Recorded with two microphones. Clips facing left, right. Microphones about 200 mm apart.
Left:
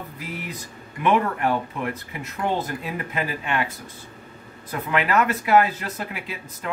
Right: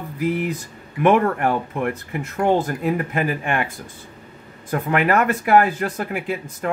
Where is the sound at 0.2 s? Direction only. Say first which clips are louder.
Right 14 dB; 50° right (ahead or behind).